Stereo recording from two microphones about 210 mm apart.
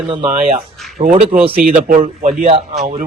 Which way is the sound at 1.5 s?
40° right (ahead or behind).